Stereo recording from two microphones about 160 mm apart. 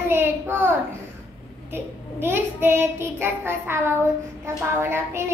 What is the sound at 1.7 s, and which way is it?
A child's voice, 15° right (ahead or behind).